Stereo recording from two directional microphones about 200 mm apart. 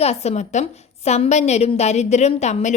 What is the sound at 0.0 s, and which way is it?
A woman's voice, 30° left (ahead or behind).